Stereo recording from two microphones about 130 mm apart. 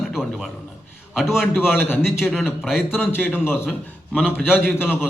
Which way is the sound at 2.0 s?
5° right (ahead or behind).